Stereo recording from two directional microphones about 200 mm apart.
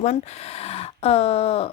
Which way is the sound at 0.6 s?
30° left (ahead or behind).